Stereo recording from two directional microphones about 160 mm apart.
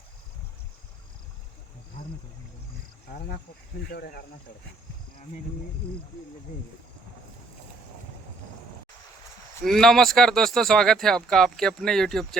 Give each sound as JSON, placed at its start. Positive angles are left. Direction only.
{"t": 3.9, "sound": "speech", "side_deg": 75}
{"t": 9.6, "sound": "speech", "side_deg": 0}